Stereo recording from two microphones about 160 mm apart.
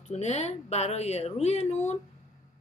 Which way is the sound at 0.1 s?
45° left (ahead or behind).